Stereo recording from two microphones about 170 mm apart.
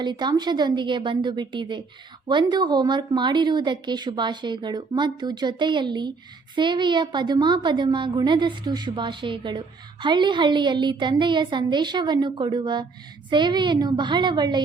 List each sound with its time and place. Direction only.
0.0 s a woman's voice: 25° right (ahead or behind)